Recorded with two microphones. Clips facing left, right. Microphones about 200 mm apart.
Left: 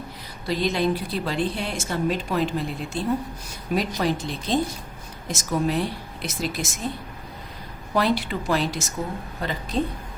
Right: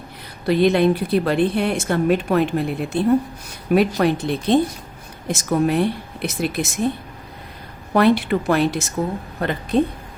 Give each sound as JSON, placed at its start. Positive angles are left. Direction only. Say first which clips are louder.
{"t": 0.4, "sound": "speech", "louder": "right 8 dB", "side_deg": -60}
{"t": 7.9, "sound": "speech", "louder": "right 7 dB", "side_deg": -60}